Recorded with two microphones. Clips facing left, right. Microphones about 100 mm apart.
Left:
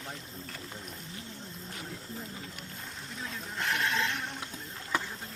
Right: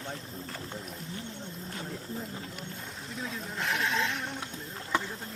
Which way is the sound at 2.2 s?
Centre (ahead or behind).